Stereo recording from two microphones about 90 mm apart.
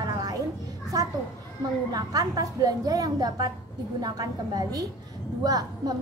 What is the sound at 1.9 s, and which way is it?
A woman's voice, 45° right (ahead or behind).